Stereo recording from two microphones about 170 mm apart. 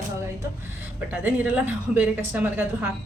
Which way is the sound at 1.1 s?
10° right (ahead or behind).